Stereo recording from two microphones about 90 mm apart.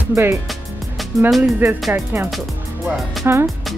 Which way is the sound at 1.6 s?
20° right (ahead or behind).